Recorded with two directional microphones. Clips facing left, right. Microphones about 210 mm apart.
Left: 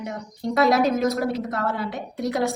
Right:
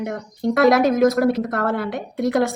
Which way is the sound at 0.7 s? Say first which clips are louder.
Right 5 dB; 55° right (ahead or behind).